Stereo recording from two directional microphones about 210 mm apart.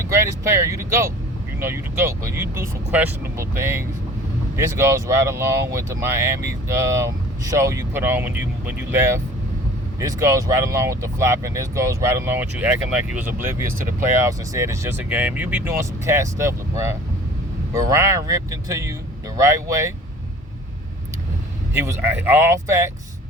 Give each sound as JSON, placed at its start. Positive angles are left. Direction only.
{"t": 0.1, "sound": "speech", "side_deg": -15}
{"t": 21.7, "sound": "speech", "side_deg": -10}